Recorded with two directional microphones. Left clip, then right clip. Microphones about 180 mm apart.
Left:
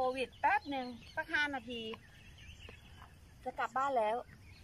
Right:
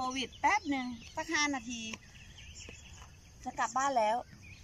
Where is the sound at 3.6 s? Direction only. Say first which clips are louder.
Right 3 dB; centre (ahead or behind).